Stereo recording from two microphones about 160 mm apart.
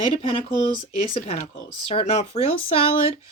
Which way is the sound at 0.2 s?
35° left (ahead or behind).